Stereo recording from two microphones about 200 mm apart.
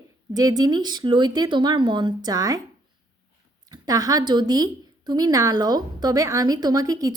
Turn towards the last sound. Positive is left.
turn(degrees=-15)  # may be behind; listen again after turning